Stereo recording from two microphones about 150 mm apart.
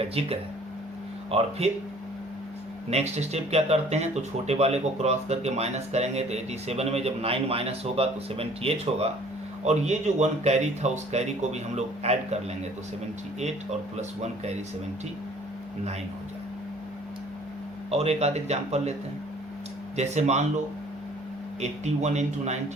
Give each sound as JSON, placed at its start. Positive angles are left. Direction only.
{"t": 0.0, "sound": "speech", "side_deg": -40}
{"t": 2.9, "sound": "speech", "side_deg": -45}
{"t": 17.9, "sound": "speech", "side_deg": -45}
{"t": 20.0, "sound": "speech", "side_deg": -50}
{"t": 21.6, "sound": "speech", "side_deg": -50}